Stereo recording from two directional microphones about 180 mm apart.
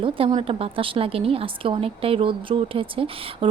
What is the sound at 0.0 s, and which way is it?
A woman's voice, 30° right (ahead or behind).